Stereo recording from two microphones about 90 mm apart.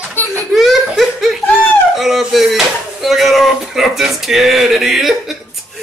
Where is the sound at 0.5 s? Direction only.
Centre (ahead or behind).